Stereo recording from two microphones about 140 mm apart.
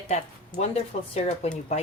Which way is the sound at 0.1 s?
50° left (ahead or behind).